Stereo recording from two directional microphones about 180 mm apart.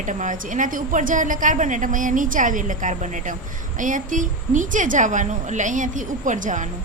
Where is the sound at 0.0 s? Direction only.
45° right (ahead or behind).